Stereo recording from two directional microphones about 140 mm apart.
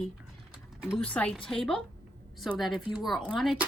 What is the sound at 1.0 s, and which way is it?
A woman's voice, 10° left (ahead or behind).